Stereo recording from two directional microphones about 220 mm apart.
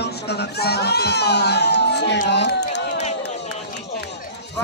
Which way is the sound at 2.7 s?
30° left (ahead or behind).